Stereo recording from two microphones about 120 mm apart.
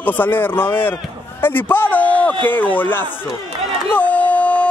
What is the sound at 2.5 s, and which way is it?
Speech, 15° left (ahead or behind).